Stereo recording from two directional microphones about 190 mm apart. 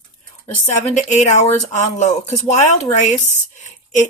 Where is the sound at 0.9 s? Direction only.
40° left (ahead or behind).